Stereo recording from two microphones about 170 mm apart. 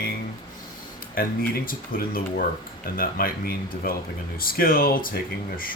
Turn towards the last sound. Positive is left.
turn(degrees=55)  # may be behind; listen again after turning